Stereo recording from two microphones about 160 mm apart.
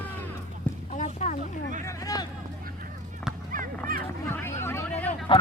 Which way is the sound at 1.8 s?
20° left (ahead or behind).